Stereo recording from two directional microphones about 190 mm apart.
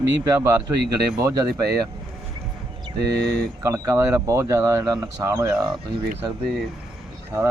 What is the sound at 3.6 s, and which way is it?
Speech, 15° right (ahead or behind).